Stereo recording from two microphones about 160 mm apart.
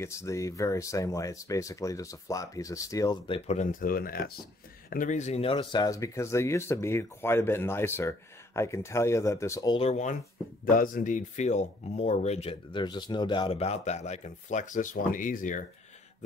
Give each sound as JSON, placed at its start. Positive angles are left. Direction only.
{"t": 0.0, "sound": "speech", "side_deg": 20}
{"t": 3.3, "sound": "speech", "side_deg": 40}
{"t": 3.8, "sound": "speech", "side_deg": 65}
{"t": 4.8, "sound": "speech", "side_deg": 55}
{"t": 9.8, "sound": "speech", "side_deg": 45}
{"t": 10.6, "sound": "speech", "side_deg": 60}